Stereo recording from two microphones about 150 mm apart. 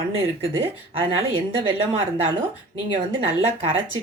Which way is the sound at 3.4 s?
40° right (ahead or behind).